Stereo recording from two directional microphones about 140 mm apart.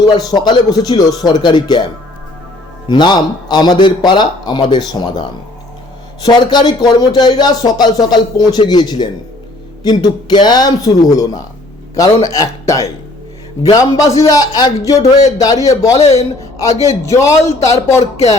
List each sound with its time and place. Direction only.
0.0 s speech: 30° left (ahead or behind)
2.9 s speech: 30° left (ahead or behind)
6.2 s a man's voice: 30° left (ahead or behind)
16.0 s speech: 50° left (ahead or behind)
17.1 s a man's voice: 20° left (ahead or behind)